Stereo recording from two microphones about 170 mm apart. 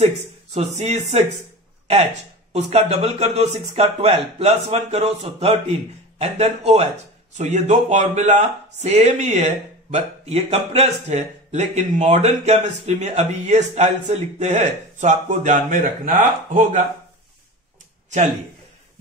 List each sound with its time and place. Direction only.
0.6 s speech: 40° right (ahead or behind)
2.5 s speech: 40° right (ahead or behind)